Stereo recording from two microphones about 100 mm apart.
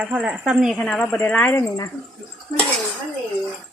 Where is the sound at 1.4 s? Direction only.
20° left (ahead or behind).